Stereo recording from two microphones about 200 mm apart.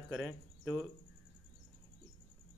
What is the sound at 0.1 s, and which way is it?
Speech, 5° left (ahead or behind).